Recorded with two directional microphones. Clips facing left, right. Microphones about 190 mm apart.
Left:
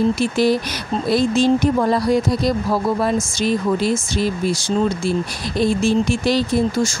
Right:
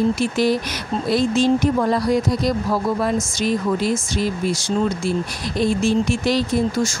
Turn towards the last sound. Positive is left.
turn(degrees=30)  # may be behind; listen again after turning